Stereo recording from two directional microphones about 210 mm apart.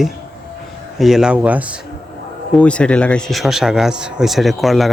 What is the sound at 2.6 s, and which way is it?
Speech, 5° left (ahead or behind).